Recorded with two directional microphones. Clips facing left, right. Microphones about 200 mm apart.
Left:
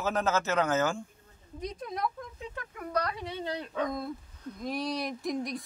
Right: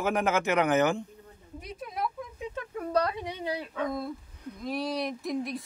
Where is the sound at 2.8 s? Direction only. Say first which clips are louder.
Right 4 dB; 30° right (ahead or behind); by 3.6 s 15° right (ahead or behind).